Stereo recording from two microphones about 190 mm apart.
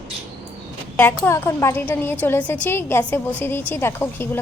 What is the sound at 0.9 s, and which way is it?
A woman's voice, 10° left (ahead or behind).